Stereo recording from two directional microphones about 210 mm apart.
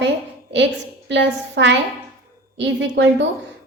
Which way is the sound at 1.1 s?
55° right (ahead or behind).